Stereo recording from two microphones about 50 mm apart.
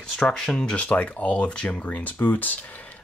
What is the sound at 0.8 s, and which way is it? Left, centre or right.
Speech, left.